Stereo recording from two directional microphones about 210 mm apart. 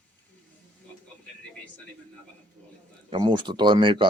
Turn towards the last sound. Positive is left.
turn(degrees=-25)  # may be behind; listen again after turning